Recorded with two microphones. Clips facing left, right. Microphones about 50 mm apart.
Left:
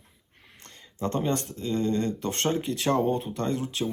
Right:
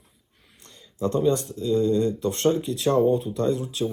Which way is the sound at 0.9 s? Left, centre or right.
Left.